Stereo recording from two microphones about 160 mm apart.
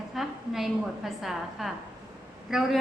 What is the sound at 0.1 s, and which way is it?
A woman's voice, centre (ahead or behind).